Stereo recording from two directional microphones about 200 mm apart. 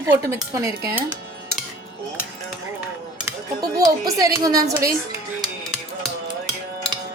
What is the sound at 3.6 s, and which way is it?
A woman's voice, 20° right (ahead or behind).